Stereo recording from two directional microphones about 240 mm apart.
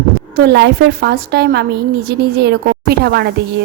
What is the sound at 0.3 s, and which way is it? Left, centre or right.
A woman's voice, right.